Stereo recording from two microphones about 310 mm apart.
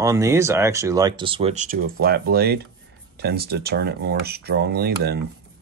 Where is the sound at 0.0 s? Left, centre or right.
Centre.